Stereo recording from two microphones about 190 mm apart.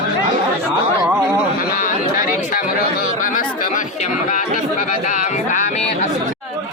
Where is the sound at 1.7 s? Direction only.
45° left (ahead or behind).